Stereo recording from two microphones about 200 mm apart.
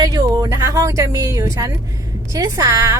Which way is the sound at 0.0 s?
20° right (ahead or behind).